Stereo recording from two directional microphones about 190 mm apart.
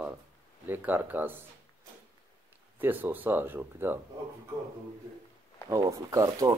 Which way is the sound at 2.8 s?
10° right (ahead or behind).